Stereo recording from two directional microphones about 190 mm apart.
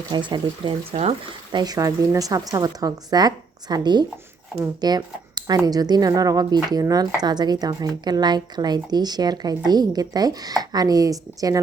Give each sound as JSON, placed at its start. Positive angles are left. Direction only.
{"t": 0.1, "sound": "speech", "side_deg": -25}
{"t": 1.5, "sound": "speech", "side_deg": -20}